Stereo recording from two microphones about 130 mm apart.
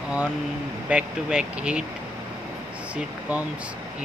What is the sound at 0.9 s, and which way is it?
Speech, 5° right (ahead or behind).